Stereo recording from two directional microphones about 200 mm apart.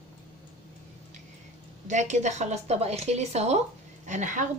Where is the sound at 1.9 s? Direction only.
35° right (ahead or behind).